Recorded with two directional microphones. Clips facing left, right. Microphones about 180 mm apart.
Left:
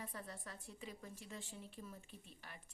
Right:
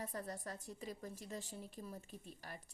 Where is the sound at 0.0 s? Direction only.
40° right (ahead or behind).